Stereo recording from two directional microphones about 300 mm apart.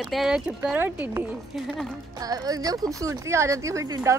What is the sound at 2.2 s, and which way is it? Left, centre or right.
Speech, centre.